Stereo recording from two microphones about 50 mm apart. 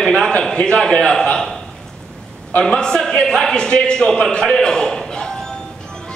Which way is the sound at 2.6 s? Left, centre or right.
Centre.